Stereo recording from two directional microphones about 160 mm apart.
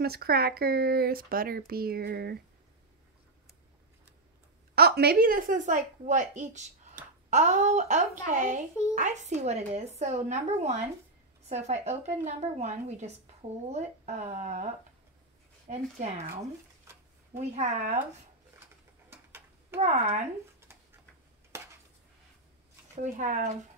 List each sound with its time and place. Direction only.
0.0 s speech: 75° right (ahead or behind)
4.7 s speech: 85° right; by 14.7 s 45° right (ahead or behind)
15.7 s speech: 45° right (ahead or behind)
16.9 s a sound: 15° right (ahead or behind)
17.6 s speech: 45° right (ahead or behind)
19.0 s a sound: 15° right (ahead or behind)
19.8 s speech: 40° right (ahead or behind)
21.5 s dishes: 15° right (ahead or behind)
23.1 s speech: 50° right (ahead or behind)